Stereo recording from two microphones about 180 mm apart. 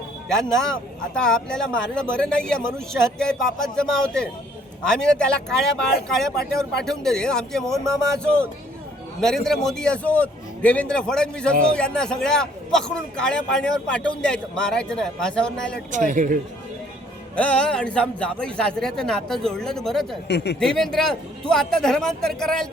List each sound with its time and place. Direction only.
0.3 s a man's voice: 5° left (ahead or behind)
15.9 s speech: 45° right (ahead or behind)
17.3 s a man's voice: 5° left (ahead or behind)
20.2 s speech: 65° left (ahead or behind)
20.6 s a man's voice: 5° left (ahead or behind)